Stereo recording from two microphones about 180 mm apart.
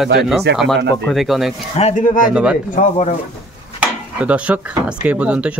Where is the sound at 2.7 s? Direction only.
45° left (ahead or behind).